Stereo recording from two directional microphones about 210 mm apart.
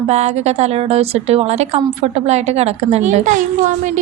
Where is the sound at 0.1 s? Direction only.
30° right (ahead or behind).